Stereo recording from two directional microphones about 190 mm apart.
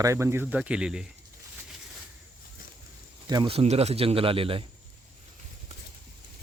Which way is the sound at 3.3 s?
25° right (ahead or behind).